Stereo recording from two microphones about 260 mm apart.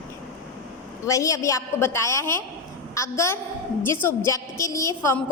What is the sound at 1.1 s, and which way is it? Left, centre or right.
A woman's voice, centre.